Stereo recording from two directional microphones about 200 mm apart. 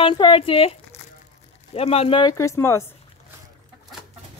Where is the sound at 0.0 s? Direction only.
25° left (ahead or behind).